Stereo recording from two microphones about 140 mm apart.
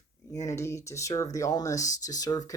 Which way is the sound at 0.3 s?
20° left (ahead or behind).